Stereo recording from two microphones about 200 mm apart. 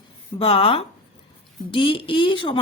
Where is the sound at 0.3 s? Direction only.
25° left (ahead or behind).